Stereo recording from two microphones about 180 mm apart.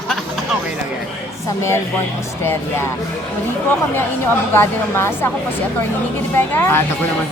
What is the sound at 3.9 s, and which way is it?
A woman's voice, 10° left (ahead or behind).